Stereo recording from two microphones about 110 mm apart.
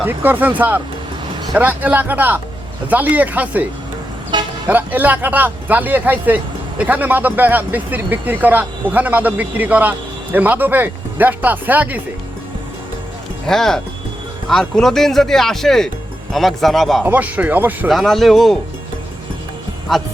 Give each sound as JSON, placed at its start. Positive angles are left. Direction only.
{"t": 0.0, "sound": "speech", "side_deg": -15}
{"t": 4.3, "sound": "speech", "side_deg": -45}
{"t": 4.7, "sound": "speech", "side_deg": -15}
{"t": 13.5, "sound": "speech", "side_deg": 5}
{"t": 17.0, "sound": "speech", "side_deg": -15}
{"t": 17.8, "sound": "speech", "side_deg": 0}
{"t": 19.9, "sound": "speech", "side_deg": 0}